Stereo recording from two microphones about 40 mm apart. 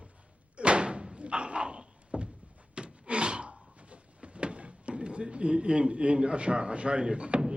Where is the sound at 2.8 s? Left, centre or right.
Right.